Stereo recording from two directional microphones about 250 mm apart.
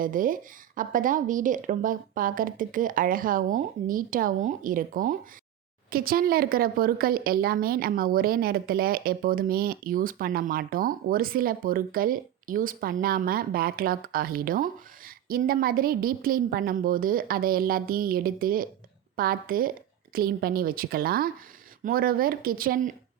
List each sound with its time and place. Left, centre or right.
0.0 s a woman's voice: right